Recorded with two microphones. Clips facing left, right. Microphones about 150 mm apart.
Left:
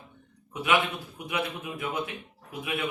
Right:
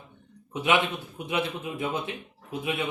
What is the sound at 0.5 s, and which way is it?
Speech, 25° right (ahead or behind).